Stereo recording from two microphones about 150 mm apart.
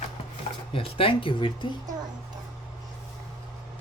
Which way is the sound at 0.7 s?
35° left (ahead or behind).